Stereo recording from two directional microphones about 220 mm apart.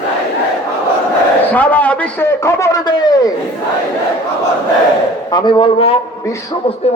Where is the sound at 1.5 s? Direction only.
5° left (ahead or behind).